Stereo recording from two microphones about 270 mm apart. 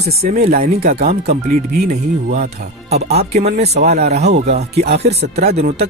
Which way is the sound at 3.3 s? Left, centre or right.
Right.